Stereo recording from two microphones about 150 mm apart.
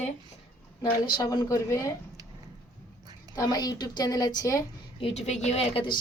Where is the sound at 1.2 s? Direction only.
20° left (ahead or behind).